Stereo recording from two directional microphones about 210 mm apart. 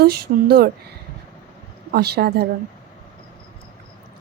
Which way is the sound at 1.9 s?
50° right (ahead or behind).